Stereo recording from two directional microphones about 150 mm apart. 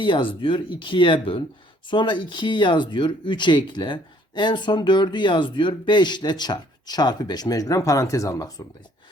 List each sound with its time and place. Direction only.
0.0 s speech: 35° left (ahead or behind)